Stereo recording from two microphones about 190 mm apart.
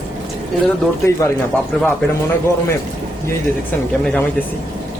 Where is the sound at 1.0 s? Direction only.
15° left (ahead or behind).